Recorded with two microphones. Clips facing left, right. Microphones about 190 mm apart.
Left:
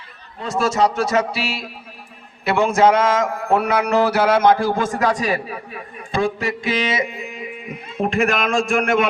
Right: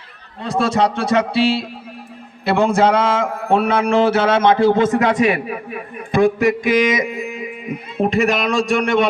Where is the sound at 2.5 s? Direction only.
30° right (ahead or behind).